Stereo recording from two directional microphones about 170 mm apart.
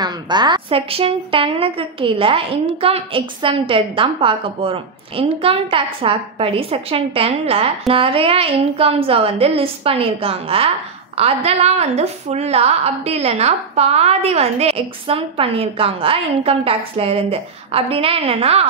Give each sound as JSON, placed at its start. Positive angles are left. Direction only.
{"t": 0.0, "sound": "a woman's voice", "side_deg": -25}